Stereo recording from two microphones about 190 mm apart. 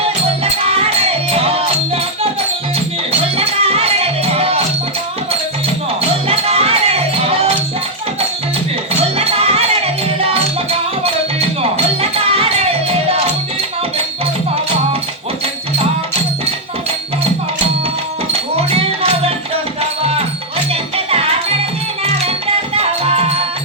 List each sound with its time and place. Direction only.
1.3 s music: 30° right (ahead or behind)
3.1 s music: 30° right (ahead or behind)
6.2 s music: 30° right (ahead or behind)
9.1 s music: 30° right (ahead or behind)
18.7 s music: 30° right (ahead or behind)
22.7 s music: 30° right (ahead or behind)